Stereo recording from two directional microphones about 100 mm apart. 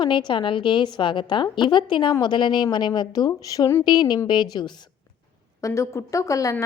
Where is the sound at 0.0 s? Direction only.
50° left (ahead or behind).